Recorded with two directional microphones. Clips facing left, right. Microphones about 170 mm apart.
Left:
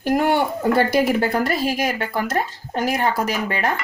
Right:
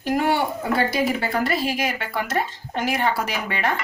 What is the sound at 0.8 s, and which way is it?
Speech, 45° left (ahead or behind).